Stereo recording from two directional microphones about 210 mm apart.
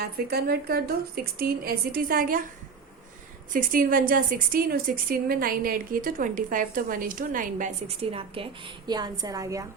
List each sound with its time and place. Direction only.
0.0 s a woman's voice: 45° right (ahead or behind)
3.5 s a woman's voice: 40° right (ahead or behind); by 9.6 s 15° right (ahead or behind)